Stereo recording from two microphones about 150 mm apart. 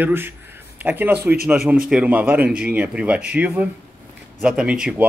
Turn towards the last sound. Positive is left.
turn(degrees=-5)  # may be behind; listen again after turning